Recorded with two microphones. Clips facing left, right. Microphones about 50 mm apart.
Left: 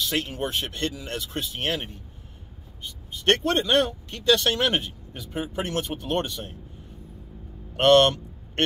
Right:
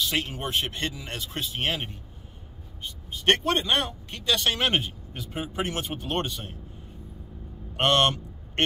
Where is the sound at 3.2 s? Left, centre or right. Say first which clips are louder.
Left 1 dB; centre.